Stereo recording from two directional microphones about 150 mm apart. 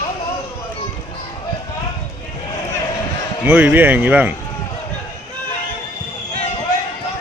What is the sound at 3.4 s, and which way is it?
Speech, 10° right (ahead or behind).